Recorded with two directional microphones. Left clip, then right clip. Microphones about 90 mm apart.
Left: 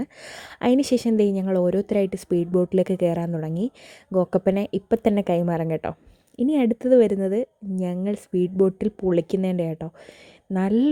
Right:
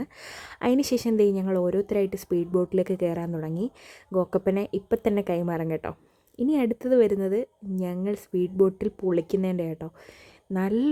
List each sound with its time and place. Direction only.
0.0 s a woman's voice: 25° left (ahead or behind)